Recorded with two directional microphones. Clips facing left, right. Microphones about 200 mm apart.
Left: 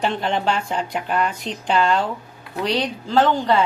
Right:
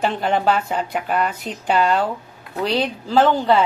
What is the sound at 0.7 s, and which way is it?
A woman's voice, 5° right (ahead or behind).